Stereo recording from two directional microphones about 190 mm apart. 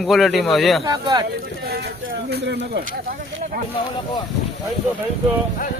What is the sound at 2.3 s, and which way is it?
Speech, 65° right (ahead or behind).